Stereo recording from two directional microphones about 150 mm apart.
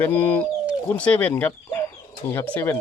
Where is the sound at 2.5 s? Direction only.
10° left (ahead or behind).